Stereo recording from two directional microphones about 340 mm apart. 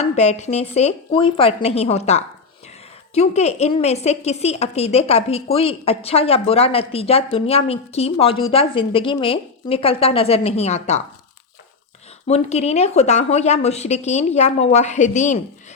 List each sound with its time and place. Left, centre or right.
0.0 s a woman's voice: centre
12.3 s a woman's voice: centre